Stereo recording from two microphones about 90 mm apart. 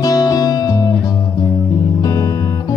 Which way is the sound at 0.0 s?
45° left (ahead or behind).